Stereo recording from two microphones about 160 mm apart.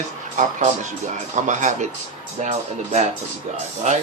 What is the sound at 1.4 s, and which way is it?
Speech, 50° right (ahead or behind).